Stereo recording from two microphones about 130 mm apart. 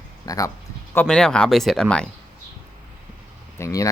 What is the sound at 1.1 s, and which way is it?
Speech, 5° left (ahead or behind).